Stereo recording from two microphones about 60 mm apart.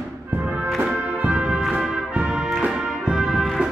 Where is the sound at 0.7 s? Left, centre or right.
Right; by 3.6 s centre.